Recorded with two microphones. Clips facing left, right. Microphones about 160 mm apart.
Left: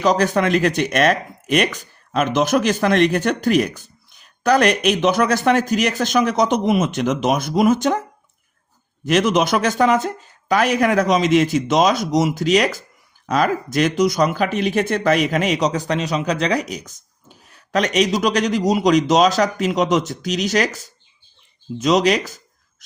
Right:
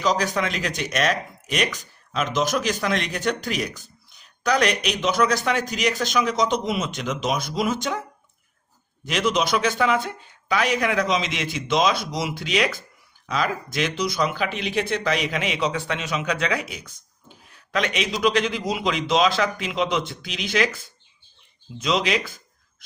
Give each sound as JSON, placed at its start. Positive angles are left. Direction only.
{"t": 0.0, "sound": "speech", "side_deg": 55}
{"t": 9.0, "sound": "speech", "side_deg": 50}